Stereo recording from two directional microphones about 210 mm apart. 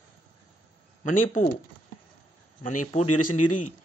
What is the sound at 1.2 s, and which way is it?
Speech, 35° left (ahead or behind).